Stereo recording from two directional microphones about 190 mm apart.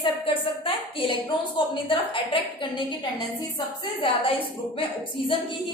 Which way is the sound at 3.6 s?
25° left (ahead or behind).